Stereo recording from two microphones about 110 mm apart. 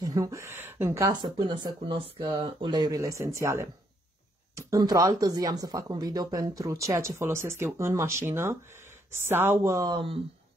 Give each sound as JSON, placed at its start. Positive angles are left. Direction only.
{"t": 0.0, "sound": "speech", "side_deg": -35}
{"t": 1.2, "sound": "speech", "side_deg": -45}
{"t": 3.0, "sound": "speech", "side_deg": -30}
{"t": 9.9, "sound": "speech", "side_deg": -60}